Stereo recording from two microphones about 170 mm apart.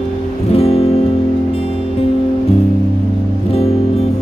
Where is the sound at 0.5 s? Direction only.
35° left (ahead or behind).